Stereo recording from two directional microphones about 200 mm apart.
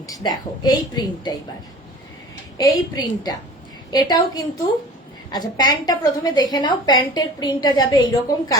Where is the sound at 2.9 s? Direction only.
20° left (ahead or behind).